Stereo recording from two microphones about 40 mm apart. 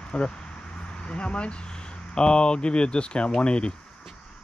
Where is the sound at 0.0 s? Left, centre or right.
Left.